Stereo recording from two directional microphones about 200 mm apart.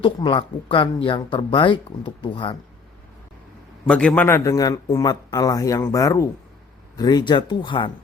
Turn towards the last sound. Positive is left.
turn(degrees=25)  # may be behind; listen again after turning